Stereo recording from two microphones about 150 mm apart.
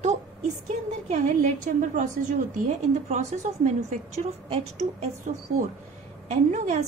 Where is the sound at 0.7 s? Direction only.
50° right (ahead or behind).